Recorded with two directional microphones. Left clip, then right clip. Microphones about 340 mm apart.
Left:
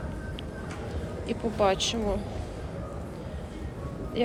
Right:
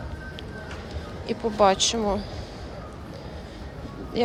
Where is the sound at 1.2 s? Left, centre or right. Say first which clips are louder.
Right 5 dB; centre.